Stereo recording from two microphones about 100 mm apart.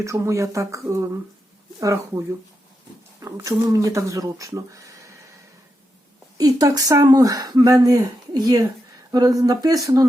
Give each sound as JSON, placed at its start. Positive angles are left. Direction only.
{"t": 0.0, "sound": "speech", "side_deg": -30}
{"t": 6.3, "sound": "speech", "side_deg": -35}